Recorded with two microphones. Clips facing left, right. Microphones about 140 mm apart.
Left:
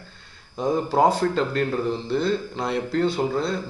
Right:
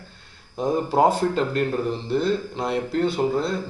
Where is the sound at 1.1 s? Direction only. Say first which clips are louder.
Even; 15° right (ahead or behind).